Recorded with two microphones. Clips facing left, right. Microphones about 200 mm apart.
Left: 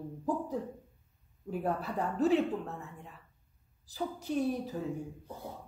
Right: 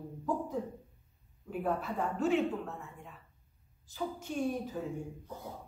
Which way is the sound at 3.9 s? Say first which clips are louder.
Left 3 dB; 35° left (ahead or behind).